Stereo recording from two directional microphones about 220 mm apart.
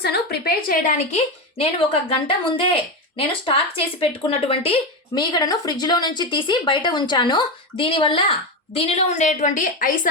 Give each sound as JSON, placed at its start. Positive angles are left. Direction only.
{"t": 0.0, "sound": "a woman's voice", "side_deg": 45}
{"t": 3.2, "sound": "a woman's voice", "side_deg": 25}